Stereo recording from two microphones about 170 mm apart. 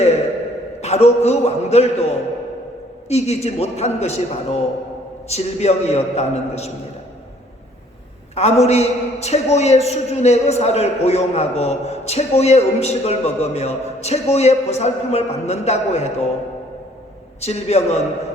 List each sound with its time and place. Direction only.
0.8 s a man's voice: 40° left (ahead or behind)
8.4 s a man's voice: 40° left (ahead or behind)
17.4 s a man's voice: 40° left (ahead or behind)